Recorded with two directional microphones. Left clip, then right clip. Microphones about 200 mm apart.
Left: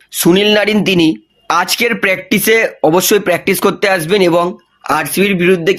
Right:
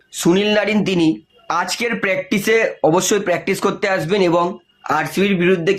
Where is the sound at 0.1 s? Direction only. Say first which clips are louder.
Left 6 dB; 45° left (ahead or behind).